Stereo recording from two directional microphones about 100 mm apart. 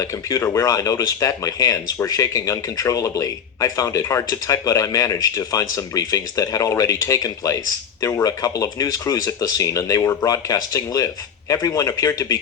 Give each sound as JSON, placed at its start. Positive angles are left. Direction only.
{"t": 0.0, "sound": "speech", "side_deg": 35}